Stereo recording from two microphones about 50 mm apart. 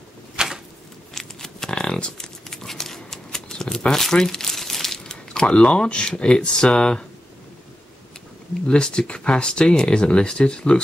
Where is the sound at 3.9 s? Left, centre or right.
Centre.